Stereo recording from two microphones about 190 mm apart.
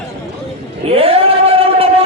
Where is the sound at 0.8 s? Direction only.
30° right (ahead or behind).